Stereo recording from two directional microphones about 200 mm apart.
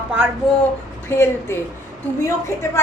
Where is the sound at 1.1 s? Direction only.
10° left (ahead or behind).